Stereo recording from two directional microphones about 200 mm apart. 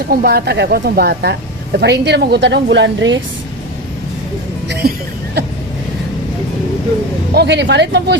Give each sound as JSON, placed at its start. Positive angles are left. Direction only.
{"t": 0.0, "sound": "speech", "side_deg": -50}
{"t": 4.7, "sound": "a sound", "side_deg": -55}
{"t": 7.3, "sound": "speech", "side_deg": -60}